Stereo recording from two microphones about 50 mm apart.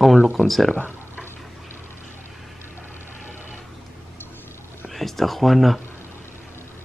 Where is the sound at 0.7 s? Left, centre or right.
Left.